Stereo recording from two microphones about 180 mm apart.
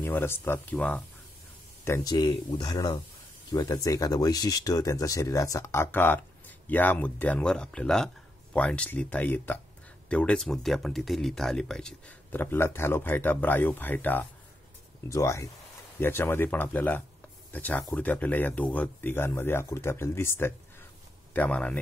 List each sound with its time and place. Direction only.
0.0 s speech: 15° left (ahead or behind)
1.9 s speech: 20° left (ahead or behind)